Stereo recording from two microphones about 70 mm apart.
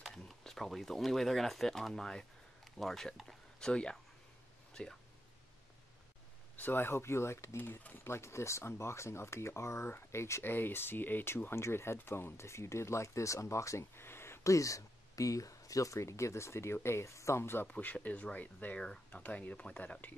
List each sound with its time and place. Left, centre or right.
0.2 s speech: centre
6.5 s speech: left
10.4 s speech: left
14.4 s speech: left
17.6 s speech: left